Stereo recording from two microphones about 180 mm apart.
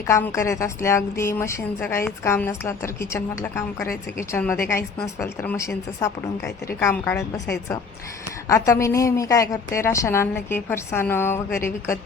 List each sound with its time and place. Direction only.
0.1 s a woman's voice: 15° left (ahead or behind)